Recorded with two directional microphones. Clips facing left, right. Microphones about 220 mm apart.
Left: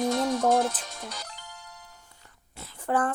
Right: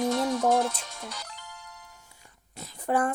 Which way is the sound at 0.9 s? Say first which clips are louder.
Left 1 dB; 35° left (ahead or behind).